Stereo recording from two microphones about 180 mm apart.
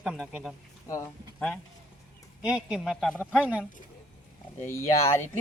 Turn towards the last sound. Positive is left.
turn(degrees=15)  # may be behind; listen again after turning